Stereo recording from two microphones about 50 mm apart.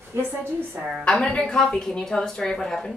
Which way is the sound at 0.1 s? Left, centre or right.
Right.